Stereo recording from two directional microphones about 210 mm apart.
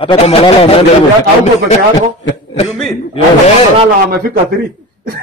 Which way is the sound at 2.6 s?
Centre (ahead or behind).